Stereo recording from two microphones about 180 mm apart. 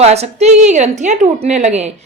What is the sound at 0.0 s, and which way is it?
A woman's voice, 35° right (ahead or behind).